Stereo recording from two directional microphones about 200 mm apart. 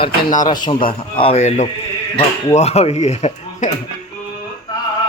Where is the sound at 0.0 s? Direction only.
20° left (ahead or behind).